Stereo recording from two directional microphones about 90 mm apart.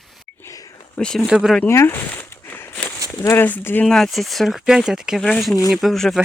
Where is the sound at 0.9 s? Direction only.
5° left (ahead or behind).